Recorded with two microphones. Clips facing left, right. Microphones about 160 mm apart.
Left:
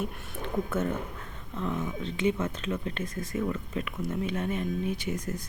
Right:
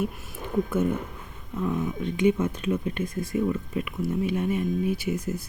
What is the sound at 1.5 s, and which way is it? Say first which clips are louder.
Speech: right 4 dB; 10° right (ahead or behind).